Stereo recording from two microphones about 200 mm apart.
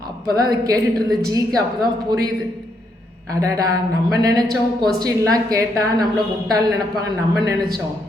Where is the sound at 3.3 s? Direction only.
15° right (ahead or behind).